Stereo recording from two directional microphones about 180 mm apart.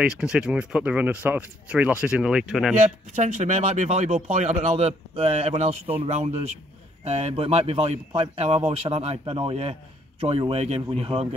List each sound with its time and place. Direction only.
0.0 s speech: 5° right (ahead or behind)
2.8 s a man's voice: 40° right (ahead or behind)